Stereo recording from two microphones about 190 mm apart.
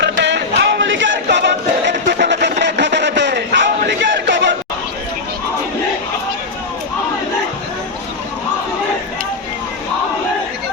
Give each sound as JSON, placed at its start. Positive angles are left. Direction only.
{"t": 0.0, "sound": "music", "side_deg": -65}